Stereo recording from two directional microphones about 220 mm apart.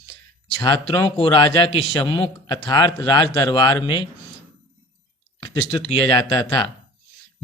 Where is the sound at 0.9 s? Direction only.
20° left (ahead or behind).